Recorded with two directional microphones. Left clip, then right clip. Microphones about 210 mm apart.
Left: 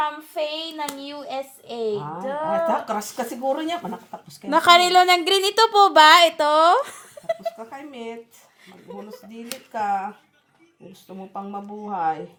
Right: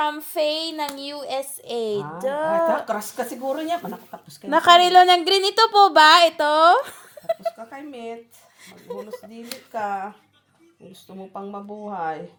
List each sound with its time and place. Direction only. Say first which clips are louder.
0.0 s child singing: right 3 dB; 50° right (ahead or behind)
0.9 s speech: right 2 dB; 50° right (ahead or behind)
2.6 s speech: right 1 dB; 25° right (ahead or behind)
4.4 s a woman's voice: right 1 dB; 5° right (ahead or behind)
7.4 s speech: right 1 dB; 25° right (ahead or behind)
8.6 s speech: right 4 dB; 50° right (ahead or behind)
11.9 s speech: left 4 dB; 25° right (ahead or behind)